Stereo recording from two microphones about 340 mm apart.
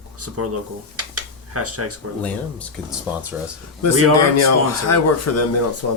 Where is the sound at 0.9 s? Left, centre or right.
Right.